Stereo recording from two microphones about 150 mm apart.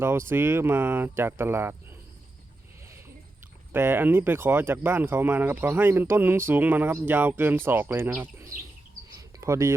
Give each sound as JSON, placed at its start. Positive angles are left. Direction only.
{"t": 0.0, "sound": "speech", "side_deg": -15}
{"t": 3.7, "sound": "speech", "side_deg": -15}